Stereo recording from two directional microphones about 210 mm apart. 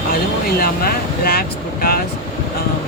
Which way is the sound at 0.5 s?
45° left (ahead or behind).